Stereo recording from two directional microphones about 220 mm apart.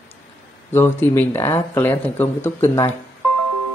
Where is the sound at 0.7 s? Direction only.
10° left (ahead or behind).